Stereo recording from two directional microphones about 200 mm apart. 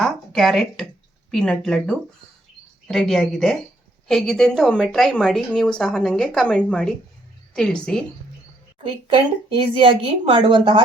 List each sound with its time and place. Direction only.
0.0 s a woman's voice: centre (ahead or behind)
8.8 s a woman's voice: 25° right (ahead or behind)